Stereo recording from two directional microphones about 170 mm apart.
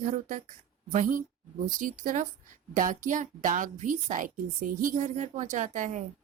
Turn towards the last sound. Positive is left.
turn(degrees=-45)  # may be behind; listen again after turning